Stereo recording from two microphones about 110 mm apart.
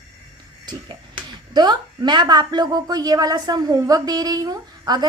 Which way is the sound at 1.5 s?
40° right (ahead or behind).